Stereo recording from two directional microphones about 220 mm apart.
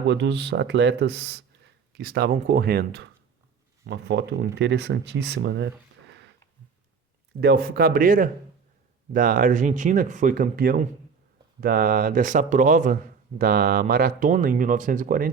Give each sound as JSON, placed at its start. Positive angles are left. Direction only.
{"t": 0.1, "sound": "speech", "side_deg": -50}
{"t": 7.4, "sound": "speech", "side_deg": -45}